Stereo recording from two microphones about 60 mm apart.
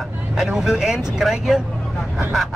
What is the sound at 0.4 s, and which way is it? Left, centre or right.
Speech, centre.